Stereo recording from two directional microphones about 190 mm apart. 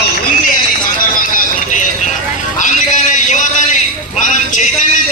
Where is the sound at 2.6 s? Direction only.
40° left (ahead or behind).